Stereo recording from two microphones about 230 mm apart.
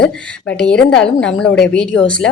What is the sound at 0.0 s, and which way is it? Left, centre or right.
Speech, centre.